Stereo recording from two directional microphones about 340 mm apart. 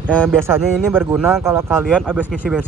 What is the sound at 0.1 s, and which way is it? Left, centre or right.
Speech, centre.